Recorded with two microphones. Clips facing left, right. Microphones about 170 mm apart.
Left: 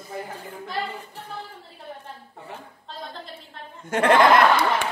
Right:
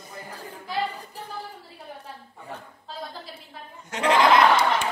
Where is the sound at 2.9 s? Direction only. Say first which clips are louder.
Right 1 dB; 5° right (ahead or behind).